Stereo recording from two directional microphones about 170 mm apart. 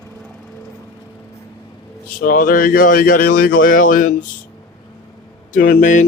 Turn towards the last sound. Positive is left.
turn(degrees=50)  # may be behind; listen again after turning